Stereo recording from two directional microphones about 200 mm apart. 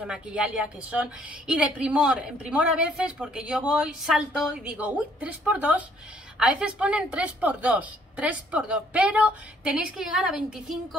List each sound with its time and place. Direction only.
0.0 s a woman's voice: 5° right (ahead or behind)